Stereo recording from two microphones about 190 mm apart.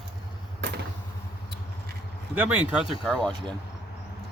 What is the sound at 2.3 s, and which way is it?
Speech, 5° right (ahead or behind).